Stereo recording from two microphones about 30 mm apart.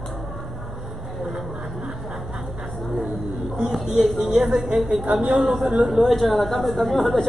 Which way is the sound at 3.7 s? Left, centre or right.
Centre.